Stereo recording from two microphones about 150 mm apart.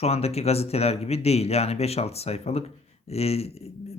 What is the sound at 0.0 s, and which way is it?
Speech, 45° left (ahead or behind).